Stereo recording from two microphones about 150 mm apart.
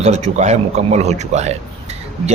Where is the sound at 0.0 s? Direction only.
50° right (ahead or behind).